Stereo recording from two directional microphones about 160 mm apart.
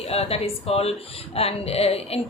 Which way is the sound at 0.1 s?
40° left (ahead or behind).